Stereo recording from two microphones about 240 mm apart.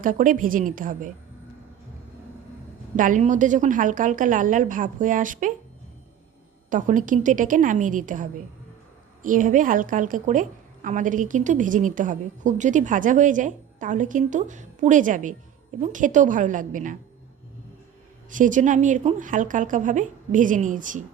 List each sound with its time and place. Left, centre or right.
0.0 s a woman's voice: right
2.9 s a woman's voice: right
6.7 s a woman's voice: right
18.3 s a woman's voice: right